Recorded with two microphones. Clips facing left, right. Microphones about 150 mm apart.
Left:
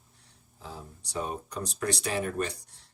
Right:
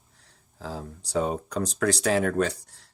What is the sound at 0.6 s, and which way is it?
Speech, 90° right.